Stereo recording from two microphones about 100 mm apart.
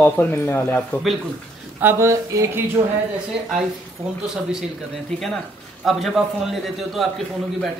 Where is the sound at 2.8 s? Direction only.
70° right (ahead or behind).